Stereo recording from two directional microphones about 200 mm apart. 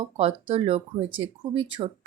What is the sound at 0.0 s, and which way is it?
Speech, 30° right (ahead or behind).